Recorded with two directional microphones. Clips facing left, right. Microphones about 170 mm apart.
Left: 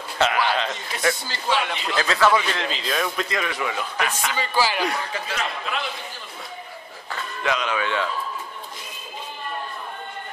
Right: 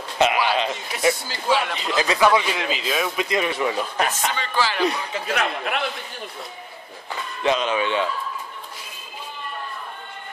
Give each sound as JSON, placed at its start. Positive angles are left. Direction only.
{"t": 0.2, "sound": "a man's voice", "side_deg": -15}
{"t": 3.3, "sound": "a man's voice", "side_deg": -25}
{"t": 4.4, "sound": "speech", "side_deg": 10}
{"t": 5.3, "sound": "a man's voice", "side_deg": -60}
{"t": 7.1, "sound": "speech", "side_deg": -25}